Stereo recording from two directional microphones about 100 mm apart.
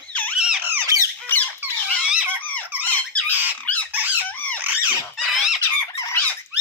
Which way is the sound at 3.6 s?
15° left (ahead or behind).